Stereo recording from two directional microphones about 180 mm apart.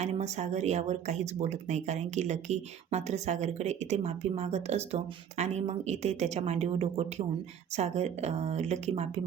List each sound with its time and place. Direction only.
0.0 s speech: 40° right (ahead or behind)